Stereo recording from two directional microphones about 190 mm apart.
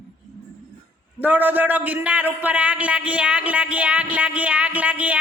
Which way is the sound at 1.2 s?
10° right (ahead or behind).